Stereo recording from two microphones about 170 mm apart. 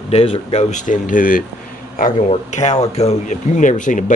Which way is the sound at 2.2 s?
40° left (ahead or behind).